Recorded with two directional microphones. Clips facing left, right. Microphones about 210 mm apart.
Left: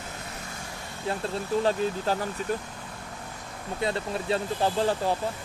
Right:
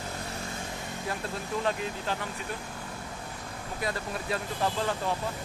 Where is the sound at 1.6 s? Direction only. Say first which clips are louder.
Left 5 dB; 30° left (ahead or behind).